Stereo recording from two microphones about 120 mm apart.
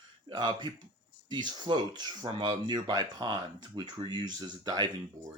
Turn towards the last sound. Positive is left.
turn(degrees=-35)  # may be behind; listen again after turning